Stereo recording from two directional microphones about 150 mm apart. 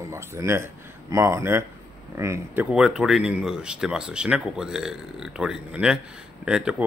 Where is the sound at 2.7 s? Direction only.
5° right (ahead or behind).